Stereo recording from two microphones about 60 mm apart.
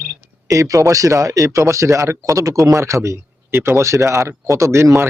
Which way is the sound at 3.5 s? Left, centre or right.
Right.